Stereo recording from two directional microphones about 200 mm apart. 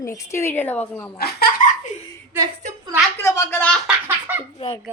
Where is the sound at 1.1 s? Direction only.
50° left (ahead or behind).